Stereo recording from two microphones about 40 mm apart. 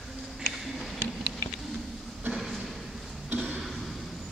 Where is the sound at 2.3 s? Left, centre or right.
Centre.